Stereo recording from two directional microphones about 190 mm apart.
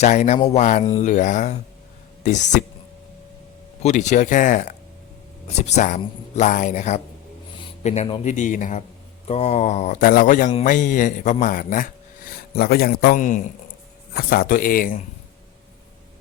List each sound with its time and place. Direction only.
0.0 s speech: 40° left (ahead or behind)
3.8 s speech: 40° left (ahead or behind)
14.1 s speech: 50° left (ahead or behind)